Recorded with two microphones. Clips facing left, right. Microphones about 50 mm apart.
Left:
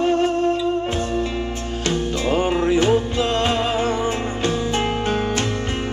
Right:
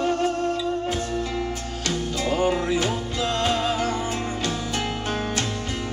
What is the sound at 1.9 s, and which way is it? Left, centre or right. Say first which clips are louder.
Music: left 4 dB; left.